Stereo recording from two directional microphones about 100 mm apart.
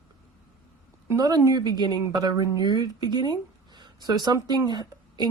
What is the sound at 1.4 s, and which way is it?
Speech, 40° right (ahead or behind).